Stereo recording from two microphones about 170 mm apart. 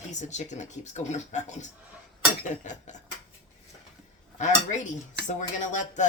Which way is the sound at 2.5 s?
45° left (ahead or behind).